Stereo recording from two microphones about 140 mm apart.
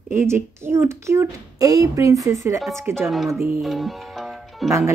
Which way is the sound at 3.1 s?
Centre (ahead or behind).